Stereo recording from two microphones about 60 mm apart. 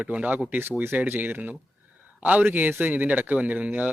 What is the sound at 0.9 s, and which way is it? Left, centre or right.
Speech, right.